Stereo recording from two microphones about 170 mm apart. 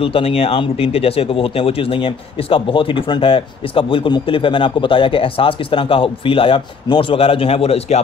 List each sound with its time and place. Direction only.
0.0 s speech: 35° left (ahead or behind)